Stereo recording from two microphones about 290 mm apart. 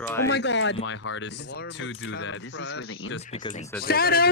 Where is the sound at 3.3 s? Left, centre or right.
Left.